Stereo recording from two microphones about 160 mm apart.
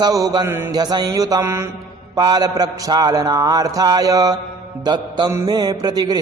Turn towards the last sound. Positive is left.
turn(degrees=-25)  # may be behind; listen again after turning